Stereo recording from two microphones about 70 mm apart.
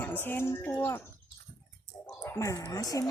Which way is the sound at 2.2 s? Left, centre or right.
Left.